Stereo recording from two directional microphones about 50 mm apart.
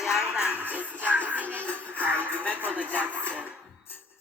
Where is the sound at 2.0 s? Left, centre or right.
Left.